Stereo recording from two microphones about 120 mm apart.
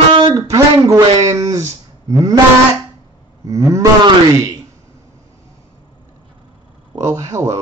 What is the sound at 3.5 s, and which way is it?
Cattle, 25° right (ahead or behind).